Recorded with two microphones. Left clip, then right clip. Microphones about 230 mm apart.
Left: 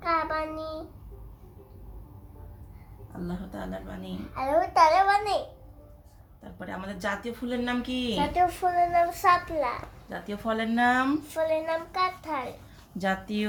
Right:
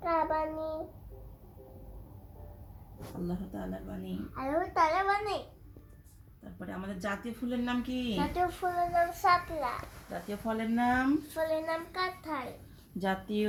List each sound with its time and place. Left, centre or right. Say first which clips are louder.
0.0 s child singing: left 2 dB; centre
3.5 s a child's voice: left 4 dB; centre
6.6 s a child's voice: left 5 dB; centre
10.8 s speech: left 6 dB; left
11.3 s a child's voice: left 5 dB; centre